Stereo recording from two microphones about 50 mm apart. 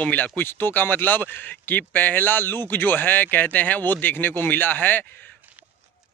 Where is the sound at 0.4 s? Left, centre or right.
Left.